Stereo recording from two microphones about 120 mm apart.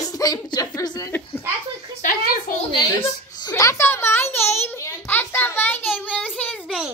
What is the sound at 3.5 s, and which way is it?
Speech, 30° left (ahead or behind).